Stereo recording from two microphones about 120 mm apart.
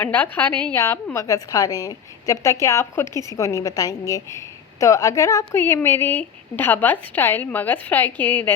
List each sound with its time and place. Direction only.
0.0 s a woman's voice: 15° left (ahead or behind)
0.8 s a woman's voice: 25° left (ahead or behind)